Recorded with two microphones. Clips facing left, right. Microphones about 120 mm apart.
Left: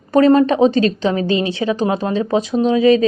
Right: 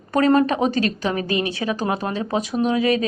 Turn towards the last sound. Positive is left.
turn(degrees=25)  # may be behind; listen again after turning